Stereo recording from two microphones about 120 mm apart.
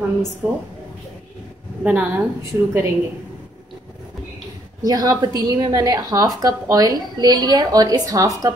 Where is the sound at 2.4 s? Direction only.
25° right (ahead or behind).